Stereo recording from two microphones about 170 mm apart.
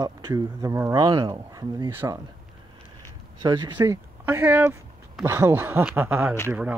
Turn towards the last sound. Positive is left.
turn(degrees=-10)  # may be behind; listen again after turning